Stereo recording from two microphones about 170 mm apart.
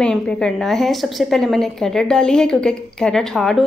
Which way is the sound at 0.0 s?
5° left (ahead or behind).